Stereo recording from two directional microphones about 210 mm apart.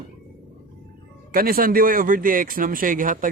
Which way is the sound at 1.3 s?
45° right (ahead or behind).